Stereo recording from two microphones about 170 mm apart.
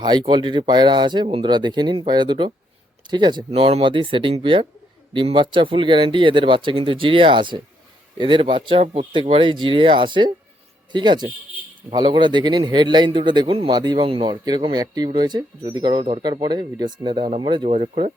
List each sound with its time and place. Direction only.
0.0 s a man's voice: 25° right (ahead or behind)